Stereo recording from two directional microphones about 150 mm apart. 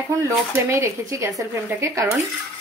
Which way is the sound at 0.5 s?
20° right (ahead or behind).